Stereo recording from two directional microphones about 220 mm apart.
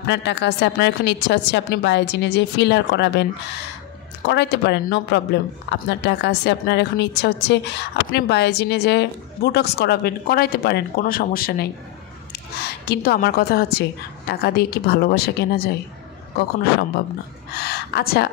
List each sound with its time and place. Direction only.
0.0 s a woman's voice: 50° left (ahead or behind)
4.3 s a woman's voice: 50° left (ahead or behind)
17.6 s speech: 45° left (ahead or behind)